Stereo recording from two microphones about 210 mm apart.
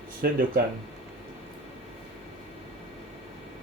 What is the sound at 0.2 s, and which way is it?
Speech, 45° right (ahead or behind).